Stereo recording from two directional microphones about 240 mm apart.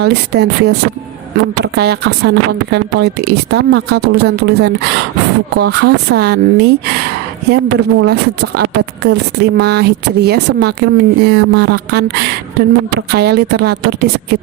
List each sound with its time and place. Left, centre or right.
0.0 s speech: right